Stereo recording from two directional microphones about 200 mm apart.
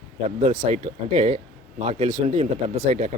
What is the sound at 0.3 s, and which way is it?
Speech, 35° right (ahead or behind).